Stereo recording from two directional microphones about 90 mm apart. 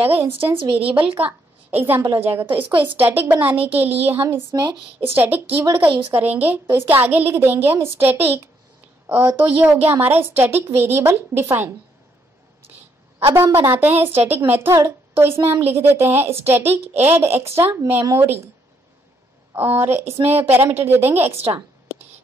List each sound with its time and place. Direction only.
0.7 s a woman's voice: 20° right (ahead or behind)
13.2 s a woman's voice: 30° right (ahead or behind)
19.5 s a woman's voice: 25° right (ahead or behind)